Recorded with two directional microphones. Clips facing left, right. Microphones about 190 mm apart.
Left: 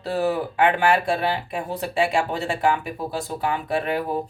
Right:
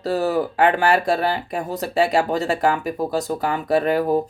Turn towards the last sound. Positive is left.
turn(degrees=-40)  # may be behind; listen again after turning